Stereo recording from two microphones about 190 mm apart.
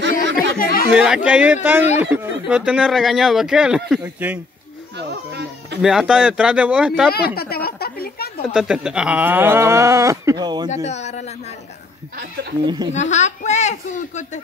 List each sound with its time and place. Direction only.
0.6 s chatter: 50° left (ahead or behind)
0.9 s speech: 5° right (ahead or behind)
4.9 s speech: 65° right (ahead or behind)
5.8 s speech: centre (ahead or behind)
7.1 s a sound: 55° left (ahead or behind)
8.5 s speech: 5° right (ahead or behind); by 10.7 s 20° right (ahead or behind)
10.7 s speech: 35° left (ahead or behind)
12.6 s speech: 20° right (ahead or behind)
12.9 s speech: 35° left (ahead or behind)